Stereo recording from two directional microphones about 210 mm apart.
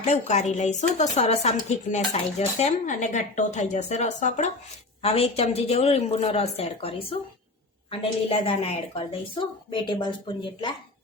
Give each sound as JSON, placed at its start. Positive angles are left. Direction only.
{"t": 0.0, "sound": "a woman's voice", "side_deg": 35}